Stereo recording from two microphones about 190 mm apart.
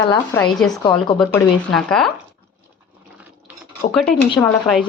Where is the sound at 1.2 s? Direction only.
5° left (ahead or behind).